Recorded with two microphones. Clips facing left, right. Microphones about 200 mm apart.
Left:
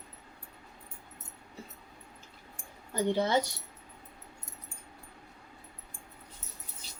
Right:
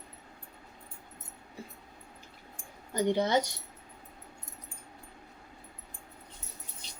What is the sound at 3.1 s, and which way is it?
Speech, 15° right (ahead or behind).